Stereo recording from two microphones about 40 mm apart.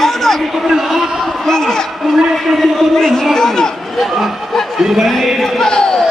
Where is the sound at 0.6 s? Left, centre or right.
Centre.